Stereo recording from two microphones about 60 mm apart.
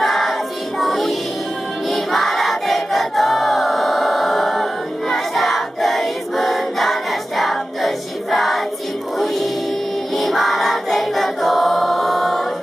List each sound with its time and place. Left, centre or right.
0.0 s music: centre
1.9 s choir: centre
10.1 s choir: centre